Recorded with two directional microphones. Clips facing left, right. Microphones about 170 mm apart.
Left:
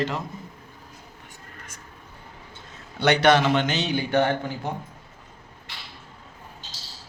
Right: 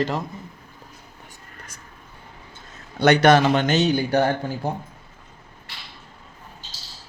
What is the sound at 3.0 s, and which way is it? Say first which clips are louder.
A man's voice: right 3 dB; 45° right (ahead or behind).